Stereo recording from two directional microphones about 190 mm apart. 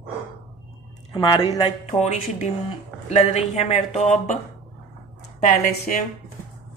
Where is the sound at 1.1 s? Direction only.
25° left (ahead or behind).